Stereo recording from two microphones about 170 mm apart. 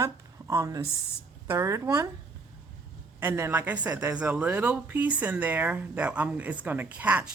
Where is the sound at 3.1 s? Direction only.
15° right (ahead or behind).